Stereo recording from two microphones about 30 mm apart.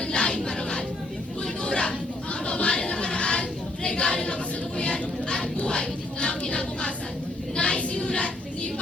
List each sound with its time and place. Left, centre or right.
0.0 s music: left
1.6 s chatter: left
2.6 s choir: left
3.8 s a sound: left
7.5 s child singing: left